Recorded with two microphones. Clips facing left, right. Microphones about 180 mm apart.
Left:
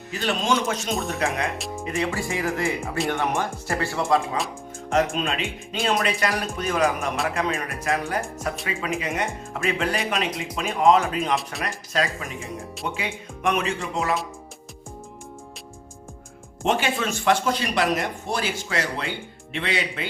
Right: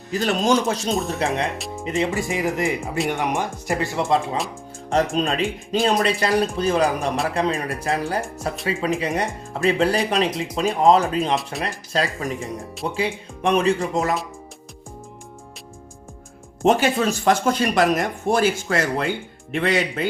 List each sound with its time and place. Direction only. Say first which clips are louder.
0.1 s speech: right 5 dB; 40° right (ahead or behind)
1.5 s speech: right 1 dB; centre (ahead or behind)
1.8 s speech: right 4 dB; 20° right (ahead or behind)
4.9 s speech: right 2 dB; 35° right (ahead or behind)
16.6 s speech: right 6 dB; 40° right (ahead or behind)